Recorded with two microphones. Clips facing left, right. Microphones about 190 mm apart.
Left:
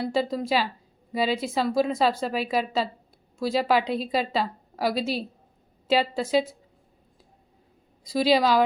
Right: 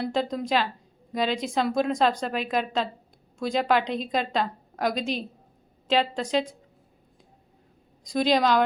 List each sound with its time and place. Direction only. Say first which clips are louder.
0.0 s a woman's voice: left 1 dB; 5° left (ahead or behind)
8.0 s a woman's voice: left 1 dB; 5° left (ahead or behind)